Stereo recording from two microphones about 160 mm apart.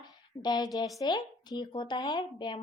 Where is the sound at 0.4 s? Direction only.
25° left (ahead or behind).